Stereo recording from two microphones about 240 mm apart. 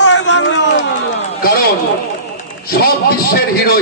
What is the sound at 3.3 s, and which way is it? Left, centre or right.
Speech, left.